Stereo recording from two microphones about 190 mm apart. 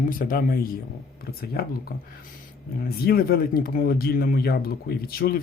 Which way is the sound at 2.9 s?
55° left (ahead or behind).